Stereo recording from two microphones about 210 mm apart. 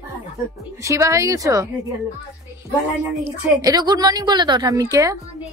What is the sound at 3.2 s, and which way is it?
A woman's voice, 15° right (ahead or behind).